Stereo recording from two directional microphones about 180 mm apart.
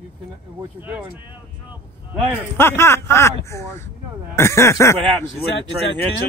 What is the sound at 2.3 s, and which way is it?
Speech, 10° left (ahead or behind).